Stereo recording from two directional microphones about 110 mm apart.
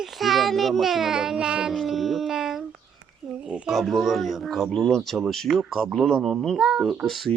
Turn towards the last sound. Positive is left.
turn(degrees=0)  # may be behind; listen again after turning